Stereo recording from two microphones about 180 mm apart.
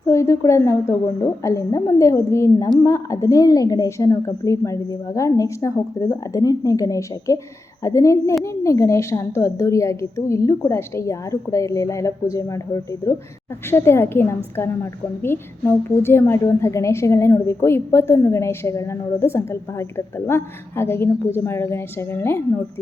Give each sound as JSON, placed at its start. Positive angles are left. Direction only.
{"t": 0.1, "sound": "a woman's voice", "side_deg": 15}